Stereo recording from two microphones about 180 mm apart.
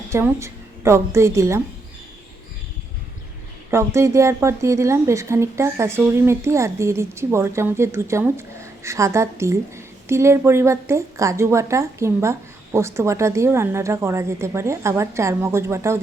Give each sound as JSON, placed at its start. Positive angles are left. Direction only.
{"t": 0.1, "sound": "a woman's voice", "side_deg": -15}
{"t": 3.7, "sound": "a woman's voice", "side_deg": -15}